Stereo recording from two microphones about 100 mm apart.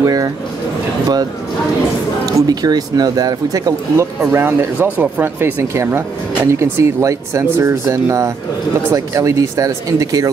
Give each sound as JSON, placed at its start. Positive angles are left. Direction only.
{"t": 0.0, "sound": "speech", "side_deg": -40}
{"t": 2.2, "sound": "speech", "side_deg": -40}